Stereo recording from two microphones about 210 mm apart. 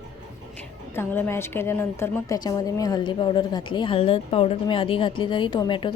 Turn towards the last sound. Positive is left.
turn(degrees=20)  # may be behind; listen again after turning